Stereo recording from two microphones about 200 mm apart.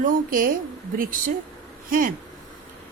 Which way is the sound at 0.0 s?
45° right (ahead or behind).